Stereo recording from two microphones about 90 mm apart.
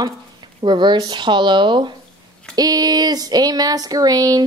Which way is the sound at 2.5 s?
45° right (ahead or behind).